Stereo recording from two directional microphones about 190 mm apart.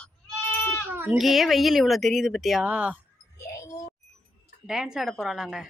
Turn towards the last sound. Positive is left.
turn(degrees=0)  # may be behind; listen again after turning